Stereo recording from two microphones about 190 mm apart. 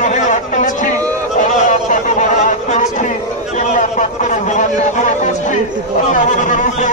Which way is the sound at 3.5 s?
40° left (ahead or behind).